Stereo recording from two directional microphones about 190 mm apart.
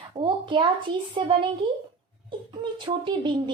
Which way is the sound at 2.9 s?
25° right (ahead or behind).